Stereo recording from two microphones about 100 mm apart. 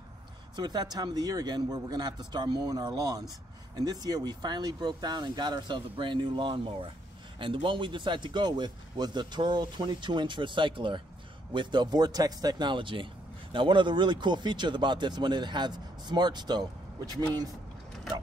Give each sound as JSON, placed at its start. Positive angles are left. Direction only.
{"t": 0.6, "sound": "speech", "side_deg": -45}